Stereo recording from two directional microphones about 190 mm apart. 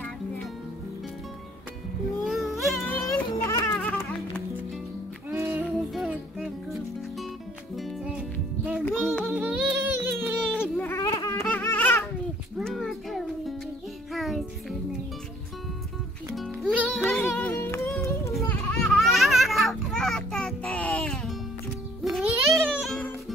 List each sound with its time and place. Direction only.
2.2 s a sound: centre (ahead or behind)
3.4 s music: 15° left (ahead or behind)
5.5 s music: centre (ahead or behind)
10.4 s a sound: 5° left (ahead or behind)
12.5 s music: centre (ahead or behind)
16.3 s music: 5° right (ahead or behind)
18.3 s children playing: 5° left (ahead or behind)
22.0 s music: centre (ahead or behind)